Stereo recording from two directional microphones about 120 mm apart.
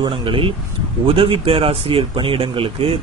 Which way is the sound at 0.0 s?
45° right (ahead or behind).